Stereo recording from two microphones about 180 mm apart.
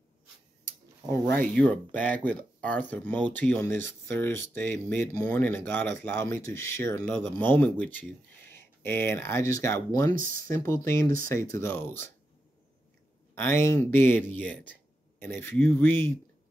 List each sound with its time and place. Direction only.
1.1 s speech: 10° left (ahead or behind)
13.3 s speech: 15° left (ahead or behind)